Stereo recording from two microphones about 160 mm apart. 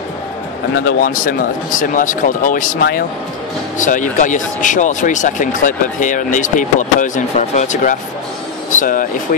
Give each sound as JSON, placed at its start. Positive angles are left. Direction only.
{"t": 0.8, "sound": "speech", "side_deg": 60}